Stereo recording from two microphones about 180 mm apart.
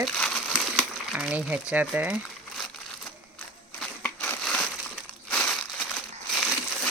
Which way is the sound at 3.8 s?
5° left (ahead or behind).